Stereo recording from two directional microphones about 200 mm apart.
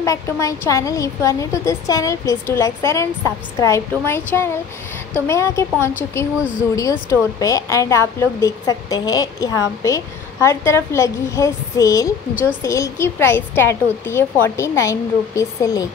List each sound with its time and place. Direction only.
0.0 s a woman's voice: 15° left (ahead or behind)